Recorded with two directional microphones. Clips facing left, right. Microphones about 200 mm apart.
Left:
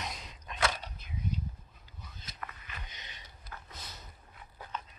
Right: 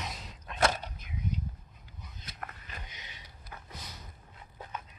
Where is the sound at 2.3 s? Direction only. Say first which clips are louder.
Right 1 dB; 45° right (ahead or behind).